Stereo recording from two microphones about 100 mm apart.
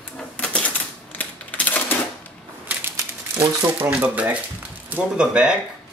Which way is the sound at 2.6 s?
20° right (ahead or behind).